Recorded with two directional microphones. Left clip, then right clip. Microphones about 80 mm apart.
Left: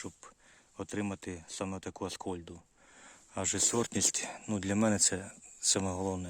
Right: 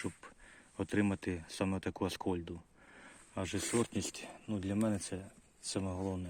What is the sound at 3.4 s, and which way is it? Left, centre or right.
Speech, left.